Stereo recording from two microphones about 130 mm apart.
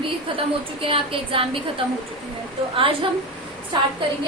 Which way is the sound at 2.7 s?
45° right (ahead or behind).